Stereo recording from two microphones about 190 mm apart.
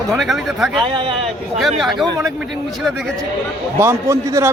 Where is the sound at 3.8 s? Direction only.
15° right (ahead or behind).